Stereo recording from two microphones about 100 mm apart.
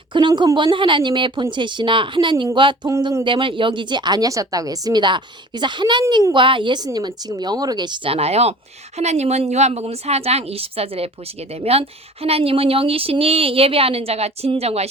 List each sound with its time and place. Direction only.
0.1 s a woman's voice: 55° right (ahead or behind)
2.6 s a sound: 55° right (ahead or behind)
3.2 s a woman's voice: 55° right (ahead or behind)
8.1 s a woman's voice: 90° right